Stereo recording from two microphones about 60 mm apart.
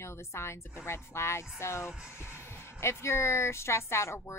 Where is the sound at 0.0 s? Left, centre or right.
Left.